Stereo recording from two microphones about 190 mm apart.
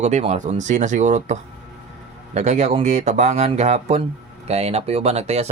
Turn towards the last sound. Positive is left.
turn(degrees=-35)  # may be behind; listen again after turning